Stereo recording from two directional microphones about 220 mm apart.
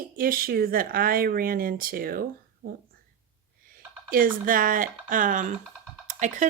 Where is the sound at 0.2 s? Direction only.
40° right (ahead or behind).